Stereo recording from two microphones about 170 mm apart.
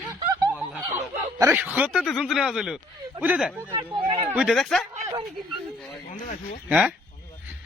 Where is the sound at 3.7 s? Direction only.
25° right (ahead or behind).